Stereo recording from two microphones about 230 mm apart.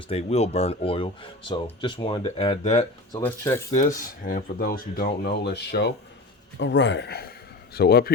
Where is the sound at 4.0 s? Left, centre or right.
Left.